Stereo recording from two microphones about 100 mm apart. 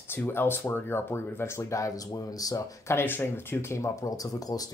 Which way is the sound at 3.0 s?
20° left (ahead or behind).